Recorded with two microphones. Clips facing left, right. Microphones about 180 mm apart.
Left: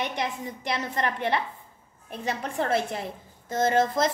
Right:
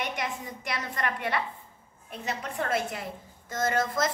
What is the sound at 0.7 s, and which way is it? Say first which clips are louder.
A child's voice: left 3 dB; 25° left (ahead or behind).